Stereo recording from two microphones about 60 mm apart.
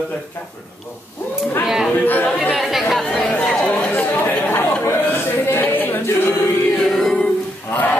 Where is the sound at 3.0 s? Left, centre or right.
Centre.